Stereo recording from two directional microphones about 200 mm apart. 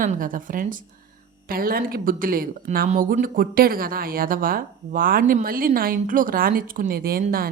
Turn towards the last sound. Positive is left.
turn(degrees=-45)  # may be behind; listen again after turning